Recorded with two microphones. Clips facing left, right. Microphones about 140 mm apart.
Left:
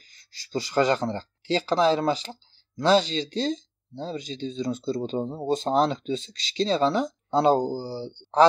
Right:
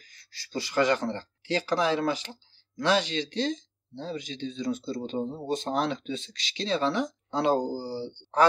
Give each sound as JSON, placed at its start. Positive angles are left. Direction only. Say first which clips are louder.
{"t": 0.5, "sound": "speech", "louder": "left 2 dB", "side_deg": 25}